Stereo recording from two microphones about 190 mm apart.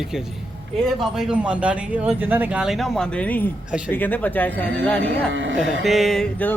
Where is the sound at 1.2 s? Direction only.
5° right (ahead or behind).